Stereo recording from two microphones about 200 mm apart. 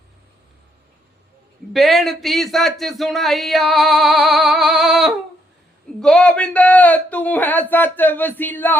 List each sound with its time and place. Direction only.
1.7 s speech: centre (ahead or behind)